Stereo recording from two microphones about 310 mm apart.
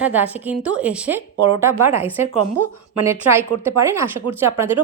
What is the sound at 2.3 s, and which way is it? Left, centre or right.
Speech, right.